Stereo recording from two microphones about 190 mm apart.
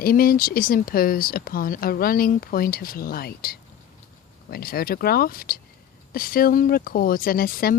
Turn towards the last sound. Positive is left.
turn(degrees=50)  # may be behind; listen again after turning